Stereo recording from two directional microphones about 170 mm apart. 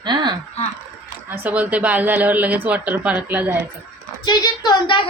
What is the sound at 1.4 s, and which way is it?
Speech, 10° right (ahead or behind).